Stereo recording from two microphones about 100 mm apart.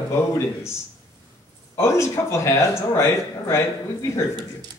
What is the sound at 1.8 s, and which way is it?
A man's voice, 30° left (ahead or behind).